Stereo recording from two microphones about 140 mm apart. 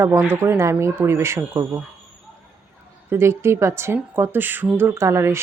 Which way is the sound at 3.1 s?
20° right (ahead or behind).